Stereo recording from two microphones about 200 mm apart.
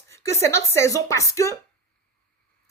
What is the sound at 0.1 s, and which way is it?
Speech, 15° left (ahead or behind).